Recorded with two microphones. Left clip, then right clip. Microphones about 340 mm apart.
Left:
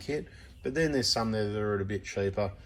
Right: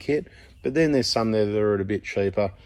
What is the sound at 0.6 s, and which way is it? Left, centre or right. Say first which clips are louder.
Speech: right 7 dB; centre.